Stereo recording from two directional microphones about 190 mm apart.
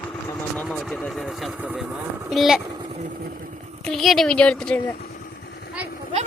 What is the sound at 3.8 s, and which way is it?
Speech, centre (ahead or behind).